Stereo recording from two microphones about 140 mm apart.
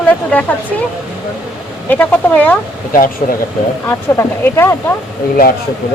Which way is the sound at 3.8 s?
20° left (ahead or behind).